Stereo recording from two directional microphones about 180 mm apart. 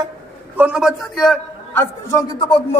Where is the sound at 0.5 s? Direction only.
5° right (ahead or behind).